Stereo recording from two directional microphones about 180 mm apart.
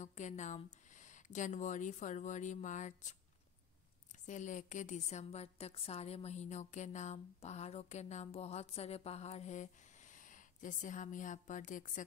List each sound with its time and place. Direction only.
0.0 s speech: 40° left (ahead or behind)
4.3 s a woman's voice: 45° left (ahead or behind)